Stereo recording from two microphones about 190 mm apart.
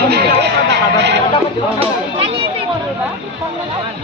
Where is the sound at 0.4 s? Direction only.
65° right (ahead or behind).